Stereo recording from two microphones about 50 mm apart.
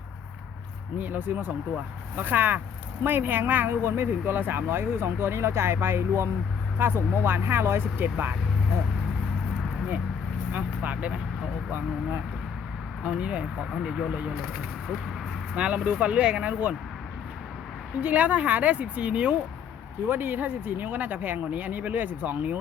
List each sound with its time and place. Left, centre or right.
0.9 s speech: right
6.7 s speech: right
13.0 s a woman's voice: right
15.5 s a woman's voice: right
18.0 s a woman's voice: right
20.1 s speech: right